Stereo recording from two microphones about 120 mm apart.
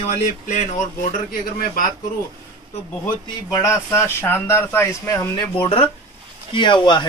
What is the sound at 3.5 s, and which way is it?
Speech, 25° left (ahead or behind).